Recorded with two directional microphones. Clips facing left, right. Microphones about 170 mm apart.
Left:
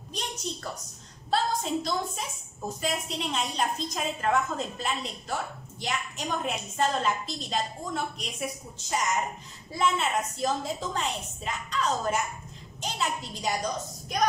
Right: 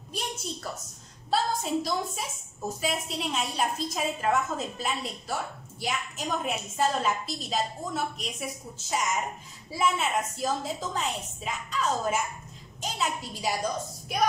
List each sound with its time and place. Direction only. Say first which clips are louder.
1.3 s a woman's voice: even; 5° right (ahead or behind)